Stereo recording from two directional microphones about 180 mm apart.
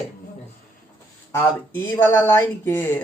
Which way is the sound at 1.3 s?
15° left (ahead or behind).